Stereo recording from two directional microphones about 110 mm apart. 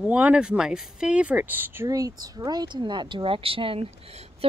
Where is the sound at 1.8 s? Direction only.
35° right (ahead or behind); by 3.9 s 55° right (ahead or behind).